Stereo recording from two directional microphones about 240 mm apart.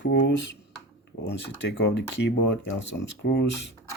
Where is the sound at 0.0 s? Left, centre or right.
Left.